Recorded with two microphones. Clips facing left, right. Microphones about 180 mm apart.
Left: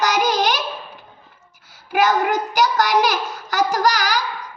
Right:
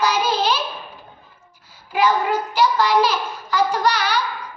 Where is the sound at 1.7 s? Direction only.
80° left.